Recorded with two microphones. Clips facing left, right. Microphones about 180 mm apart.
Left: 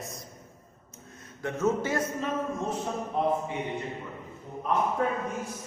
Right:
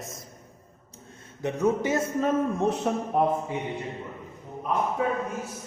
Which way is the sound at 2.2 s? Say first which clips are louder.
Right 6 dB; 65° right (ahead or behind).